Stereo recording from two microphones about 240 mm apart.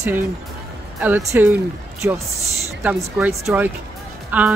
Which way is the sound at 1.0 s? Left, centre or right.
Centre.